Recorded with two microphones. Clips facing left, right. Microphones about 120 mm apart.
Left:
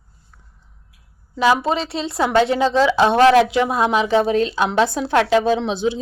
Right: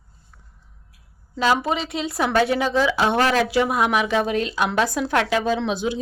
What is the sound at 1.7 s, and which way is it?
A woman's voice, 30° left (ahead or behind).